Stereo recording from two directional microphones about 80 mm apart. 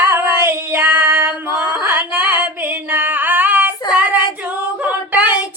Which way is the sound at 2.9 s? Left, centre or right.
Right.